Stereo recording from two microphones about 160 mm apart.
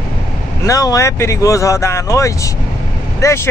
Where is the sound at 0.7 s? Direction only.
20° left (ahead or behind).